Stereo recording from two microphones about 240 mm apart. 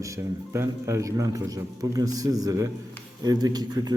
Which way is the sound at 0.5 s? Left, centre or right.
Centre.